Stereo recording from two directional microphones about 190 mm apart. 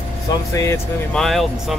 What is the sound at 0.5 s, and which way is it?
Speech, 15° left (ahead or behind).